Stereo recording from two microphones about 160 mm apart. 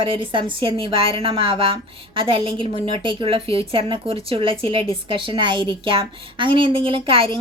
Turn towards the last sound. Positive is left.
turn(degrees=-35)  # may be behind; listen again after turning